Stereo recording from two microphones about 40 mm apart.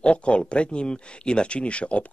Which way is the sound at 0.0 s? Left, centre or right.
Left.